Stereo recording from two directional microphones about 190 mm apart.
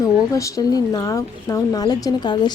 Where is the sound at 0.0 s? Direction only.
15° left (ahead or behind).